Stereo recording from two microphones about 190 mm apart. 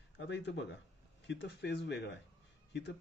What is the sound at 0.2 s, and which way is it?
Speech, 70° left (ahead or behind).